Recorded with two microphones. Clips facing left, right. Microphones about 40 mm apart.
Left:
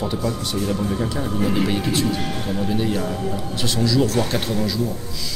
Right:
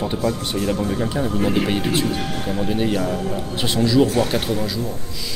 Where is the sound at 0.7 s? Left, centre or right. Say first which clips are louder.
Right 1 dB; centre.